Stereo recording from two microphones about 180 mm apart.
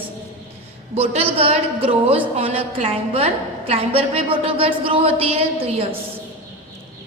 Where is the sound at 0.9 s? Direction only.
35° right (ahead or behind).